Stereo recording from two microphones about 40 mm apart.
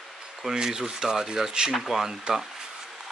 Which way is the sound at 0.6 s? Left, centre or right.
Centre.